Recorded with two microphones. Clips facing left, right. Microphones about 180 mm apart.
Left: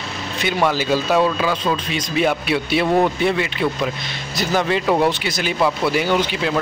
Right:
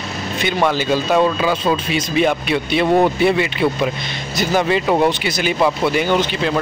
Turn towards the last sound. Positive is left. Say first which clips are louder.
# right 2 dB
turn(degrees=5)  # may be behind; listen again after turning